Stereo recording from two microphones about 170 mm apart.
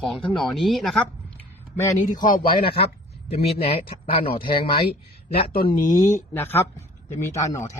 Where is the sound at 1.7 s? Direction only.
15° left (ahead or behind).